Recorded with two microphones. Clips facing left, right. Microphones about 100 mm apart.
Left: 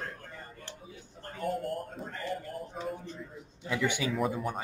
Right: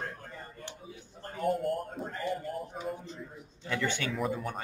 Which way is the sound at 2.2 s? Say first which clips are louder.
Right 2 dB; 15° right (ahead or behind).